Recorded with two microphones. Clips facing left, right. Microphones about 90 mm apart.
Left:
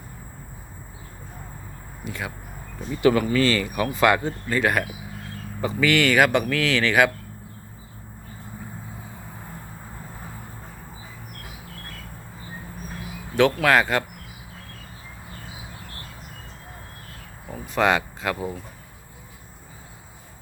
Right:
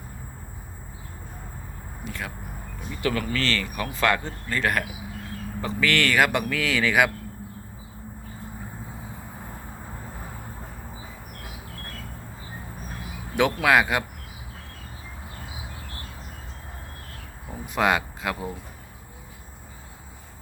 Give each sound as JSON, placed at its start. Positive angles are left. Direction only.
{"t": 2.0, "sound": "speech", "side_deg": 5}
{"t": 3.0, "sound": "speech", "side_deg": 20}
{"t": 13.3, "sound": "speech", "side_deg": -10}
{"t": 17.7, "sound": "speech", "side_deg": -5}